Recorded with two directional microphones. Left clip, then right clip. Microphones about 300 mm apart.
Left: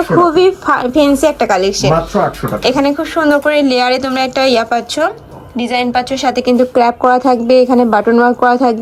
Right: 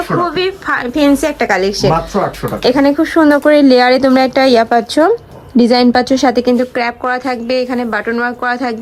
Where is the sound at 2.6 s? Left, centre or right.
Centre.